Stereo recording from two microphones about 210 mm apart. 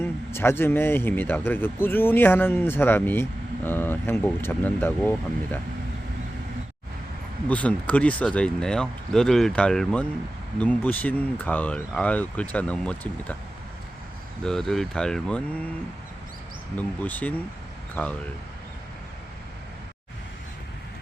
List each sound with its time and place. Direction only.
0.0 s a man's voice: 10° left (ahead or behind)
7.4 s a man's voice: 5° left (ahead or behind)
14.4 s speech: centre (ahead or behind)
16.7 s a man's voice: 5° left (ahead or behind)